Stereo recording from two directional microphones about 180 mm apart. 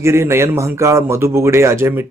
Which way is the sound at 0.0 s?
15° right (ahead or behind).